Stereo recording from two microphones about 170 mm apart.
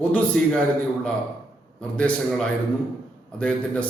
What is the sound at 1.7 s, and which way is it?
A man's voice, 5° left (ahead or behind).